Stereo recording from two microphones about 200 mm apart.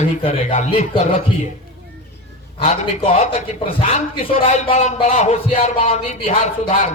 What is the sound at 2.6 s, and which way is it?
A man's voice, 30° left (ahead or behind).